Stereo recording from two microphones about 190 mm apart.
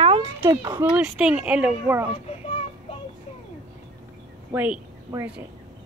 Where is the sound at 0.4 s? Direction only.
15° right (ahead or behind).